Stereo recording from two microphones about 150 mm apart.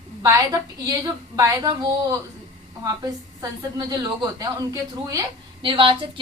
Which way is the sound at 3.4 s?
25° right (ahead or behind).